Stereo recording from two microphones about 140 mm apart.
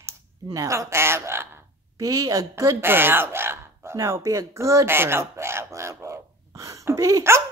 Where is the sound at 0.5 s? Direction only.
20° right (ahead or behind).